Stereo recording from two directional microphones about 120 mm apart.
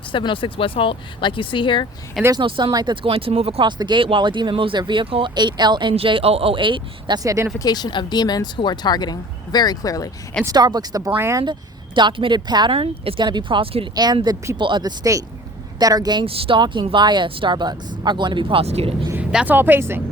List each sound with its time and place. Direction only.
0.1 s speech: 40° left (ahead or behind)
2.3 s speech: 45° right (ahead or behind)
3.7 s speech: 40° right (ahead or behind)
5.9 s speech: 50° right (ahead or behind)
7.2 s speech: 25° right (ahead or behind)
7.6 s speech: 35° left (ahead or behind)
10.4 s speech: 35° right (ahead or behind)
11.9 s speech: 45° right (ahead or behind)
12.7 s speech: 50° right (ahead or behind)
13.9 s speech: 35° right (ahead or behind)
16.2 s speech: 50° right (ahead or behind)
19.3 s speech: 5° right (ahead or behind)
19.5 s speech: 15° right (ahead or behind)